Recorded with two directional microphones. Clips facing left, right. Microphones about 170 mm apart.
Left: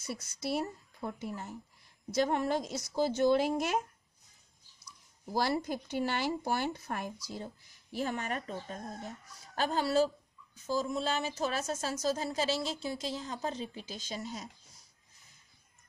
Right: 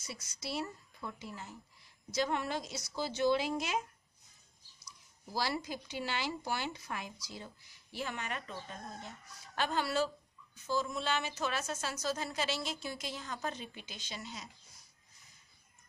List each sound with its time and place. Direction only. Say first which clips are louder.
0.0 s speech: left 7 dB; 55° left (ahead or behind)
5.6 s a woman's voice: left 7 dB; 50° left (ahead or behind)